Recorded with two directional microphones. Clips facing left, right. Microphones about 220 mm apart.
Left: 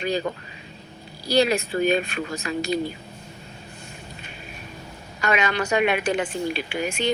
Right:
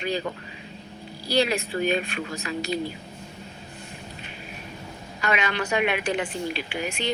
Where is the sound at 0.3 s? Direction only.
40° left (ahead or behind).